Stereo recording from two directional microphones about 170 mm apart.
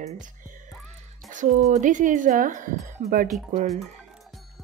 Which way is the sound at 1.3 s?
50° right (ahead or behind).